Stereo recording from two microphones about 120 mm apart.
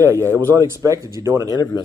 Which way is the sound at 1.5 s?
30° left (ahead or behind).